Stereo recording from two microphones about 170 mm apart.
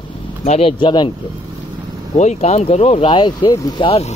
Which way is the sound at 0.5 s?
35° left (ahead or behind).